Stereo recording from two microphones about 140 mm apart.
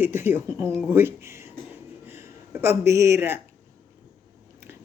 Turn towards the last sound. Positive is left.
turn(degrees=-20)  # may be behind; listen again after turning